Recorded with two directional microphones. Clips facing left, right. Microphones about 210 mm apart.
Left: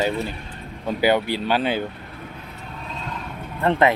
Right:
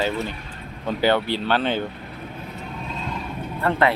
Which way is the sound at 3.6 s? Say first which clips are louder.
Left 2 dB; 20° left (ahead or behind).